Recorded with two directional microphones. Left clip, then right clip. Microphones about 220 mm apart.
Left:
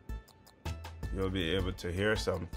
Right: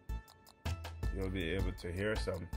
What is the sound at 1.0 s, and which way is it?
Speech, 5° left (ahead or behind).